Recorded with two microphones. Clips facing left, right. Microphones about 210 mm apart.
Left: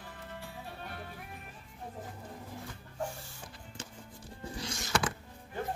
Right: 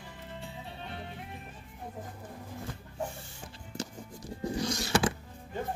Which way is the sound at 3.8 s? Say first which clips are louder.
Right 9 dB; 40° right (ahead or behind).